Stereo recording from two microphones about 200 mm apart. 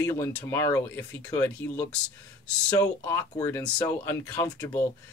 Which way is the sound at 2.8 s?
20° left (ahead or behind).